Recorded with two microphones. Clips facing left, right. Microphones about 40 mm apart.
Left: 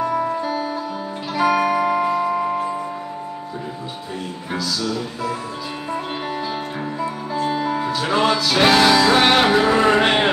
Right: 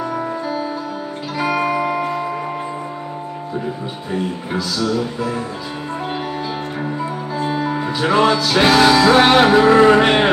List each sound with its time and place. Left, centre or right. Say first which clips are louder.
0.0 s music: left 2 dB; centre
1.3 s music: left 3 dB; centre
1.8 s tubular bells: left 1 dB; centre
4.7 s music: right 7 dB; right
6.8 s music: right 2 dB; centre
8.3 s music: right 2 dB; centre